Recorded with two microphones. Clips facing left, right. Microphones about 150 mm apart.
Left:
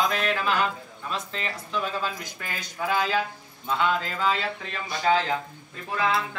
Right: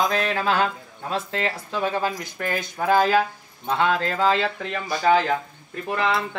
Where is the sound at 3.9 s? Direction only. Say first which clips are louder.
Right 4 dB; 75° right (ahead or behind).